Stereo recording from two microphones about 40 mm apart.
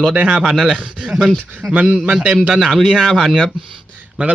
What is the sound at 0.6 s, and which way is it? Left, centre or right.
Speech, right.